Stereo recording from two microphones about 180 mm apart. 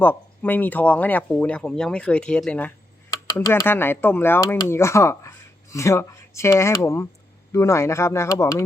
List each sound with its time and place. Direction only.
0.0 s speech: 10° left (ahead or behind)